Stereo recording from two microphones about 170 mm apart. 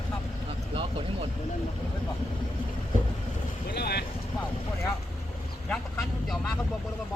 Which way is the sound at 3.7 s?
70° left (ahead or behind).